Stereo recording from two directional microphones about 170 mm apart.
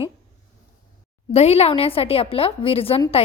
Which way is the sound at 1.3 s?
40° left (ahead or behind).